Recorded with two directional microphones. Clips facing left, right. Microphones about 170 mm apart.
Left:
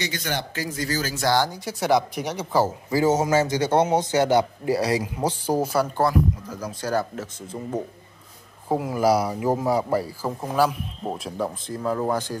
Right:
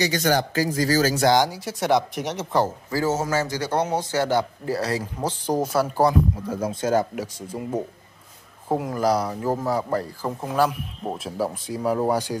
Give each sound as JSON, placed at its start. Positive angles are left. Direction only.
{"t": 0.0, "sound": "a man's voice", "side_deg": -40}
{"t": 1.2, "sound": "speech", "side_deg": -20}
{"t": 1.5, "sound": "speech", "side_deg": 0}
{"t": 2.9, "sound": "a man's voice", "side_deg": 15}
{"t": 6.1, "sound": "speech", "side_deg": -30}
{"t": 8.6, "sound": "speech", "side_deg": 0}